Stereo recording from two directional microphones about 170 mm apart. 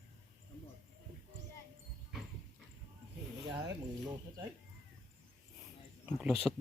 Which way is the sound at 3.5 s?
20° right (ahead or behind).